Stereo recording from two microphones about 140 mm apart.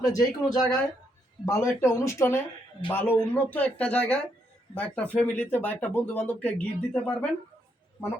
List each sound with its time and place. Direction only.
0.0 s speech: 25° left (ahead or behind)